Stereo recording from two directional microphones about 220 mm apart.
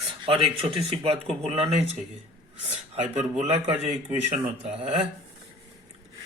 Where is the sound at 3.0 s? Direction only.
30° right (ahead or behind).